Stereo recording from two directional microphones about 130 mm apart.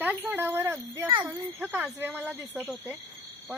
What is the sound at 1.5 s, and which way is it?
Speech, 15° right (ahead or behind).